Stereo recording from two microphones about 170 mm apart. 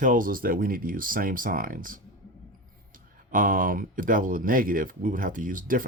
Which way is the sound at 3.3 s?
55° right (ahead or behind).